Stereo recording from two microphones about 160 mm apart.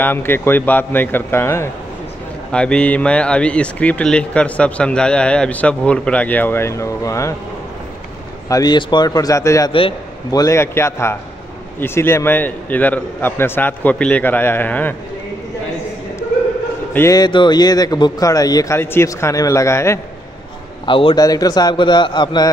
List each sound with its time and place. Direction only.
0.0 s speech: 15° left (ahead or behind)
8.5 s a man's voice: 25° left (ahead or behind)
9.7 s a man's voice: 35° left (ahead or behind)
10.4 s speech: 15° left (ahead or behind)
16.9 s a man's voice: 20° left (ahead or behind)
20.8 s a man's voice: 30° left (ahead or behind)